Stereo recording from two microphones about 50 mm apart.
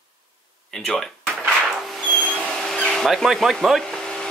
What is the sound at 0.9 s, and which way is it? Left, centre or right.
Speech, centre.